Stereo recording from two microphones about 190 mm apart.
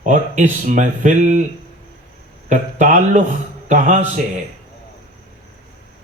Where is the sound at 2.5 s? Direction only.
40° right (ahead or behind).